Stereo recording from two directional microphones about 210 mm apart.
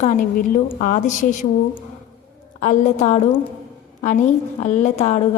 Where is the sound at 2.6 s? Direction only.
35° left (ahead or behind).